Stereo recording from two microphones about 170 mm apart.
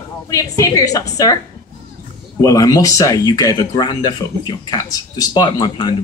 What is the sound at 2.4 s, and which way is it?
Speech, 20° left (ahead or behind).